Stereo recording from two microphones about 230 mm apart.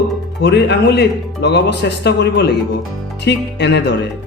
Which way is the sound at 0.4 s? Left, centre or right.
Left.